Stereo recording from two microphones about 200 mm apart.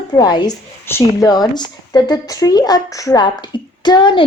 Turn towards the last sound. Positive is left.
turn(degrees=25)  # may be behind; listen again after turning